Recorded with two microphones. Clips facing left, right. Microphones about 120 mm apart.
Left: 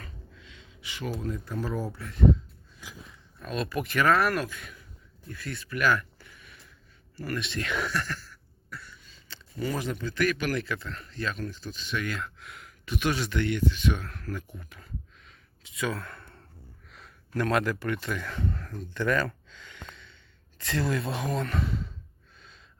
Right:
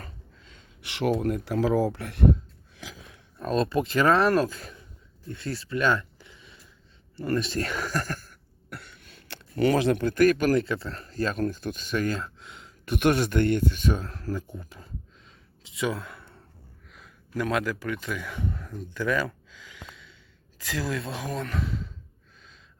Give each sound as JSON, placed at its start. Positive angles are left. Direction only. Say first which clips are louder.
{"t": 0.0, "sound": "a sound", "louder": "right 1 dB", "side_deg": -40}
{"t": 3.4, "sound": "speech", "louder": "right 6 dB", "side_deg": -30}
{"t": 5.3, "sound": "a sound", "louder": "right 5 dB", "side_deg": -30}
{"t": 7.2, "sound": "speech", "louder": "right 6 dB", "side_deg": -25}
{"t": 7.4, "sound": "cough", "louder": "right 2 dB", "side_deg": -40}
{"t": 9.6, "sound": "speech", "louder": "right 9 dB", "side_deg": -75}
{"t": 10.2, "sound": "speech", "louder": "right 6 dB", "side_deg": -45}
{"t": 10.5, "sound": "speech", "louder": "right 7 dB", "side_deg": -30}
{"t": 12.1, "sound": "a sound", "louder": "right 3 dB", "side_deg": -30}
{"t": 12.8, "sound": "speech", "louder": "right 6 dB", "side_deg": -55}
{"t": 13.9, "sound": "speech", "louder": "right 4 dB", "side_deg": -30}
{"t": 16.1, "sound": "a sound", "louder": "even", "side_deg": -5}
{"t": 16.9, "sound": "speech", "louder": "even", "side_deg": -5}